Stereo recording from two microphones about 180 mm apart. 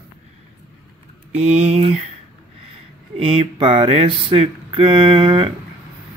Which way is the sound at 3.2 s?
30° right (ahead or behind).